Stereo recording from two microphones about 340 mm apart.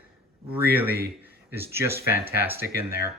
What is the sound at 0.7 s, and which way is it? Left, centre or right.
Speech, centre.